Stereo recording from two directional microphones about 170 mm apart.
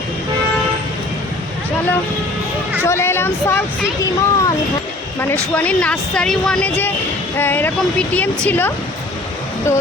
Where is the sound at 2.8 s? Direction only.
15° left (ahead or behind).